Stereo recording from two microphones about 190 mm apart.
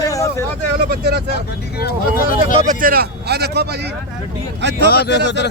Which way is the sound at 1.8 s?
50° left (ahead or behind).